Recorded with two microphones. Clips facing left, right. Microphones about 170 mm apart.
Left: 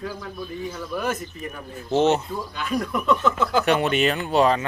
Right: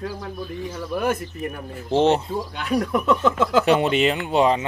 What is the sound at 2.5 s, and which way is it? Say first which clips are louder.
Speech: right 1 dB; 70° right (ahead or behind).